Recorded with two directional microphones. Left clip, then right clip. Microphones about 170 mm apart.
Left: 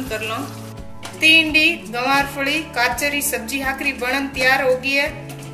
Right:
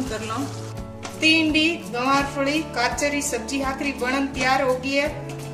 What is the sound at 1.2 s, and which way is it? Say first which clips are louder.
A woman's voice: left 5 dB; 50° right (ahead or behind).